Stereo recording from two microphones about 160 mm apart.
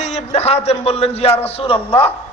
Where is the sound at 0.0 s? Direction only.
40° left (ahead or behind).